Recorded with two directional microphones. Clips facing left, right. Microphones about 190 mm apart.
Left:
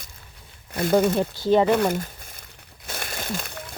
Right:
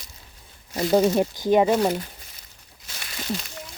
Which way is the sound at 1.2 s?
15° right (ahead or behind).